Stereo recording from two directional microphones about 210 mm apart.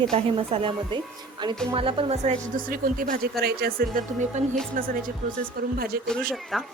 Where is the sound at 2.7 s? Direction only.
40° right (ahead or behind).